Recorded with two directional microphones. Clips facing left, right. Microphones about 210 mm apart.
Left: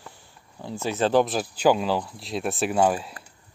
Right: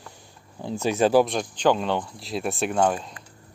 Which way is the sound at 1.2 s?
5° left (ahead or behind).